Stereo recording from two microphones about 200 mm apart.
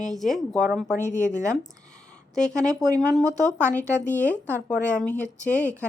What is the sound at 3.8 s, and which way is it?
Speech, 10° left (ahead or behind).